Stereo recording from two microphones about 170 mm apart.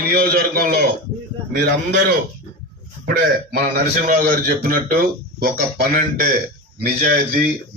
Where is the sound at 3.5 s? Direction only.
65° right (ahead or behind).